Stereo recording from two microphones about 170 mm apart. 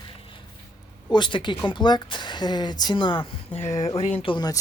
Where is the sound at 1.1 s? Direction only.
25° left (ahead or behind).